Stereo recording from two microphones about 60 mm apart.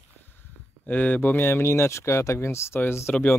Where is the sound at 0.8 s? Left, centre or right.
Left.